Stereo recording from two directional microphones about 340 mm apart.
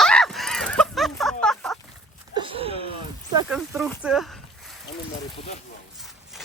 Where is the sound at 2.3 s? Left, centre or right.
Centre.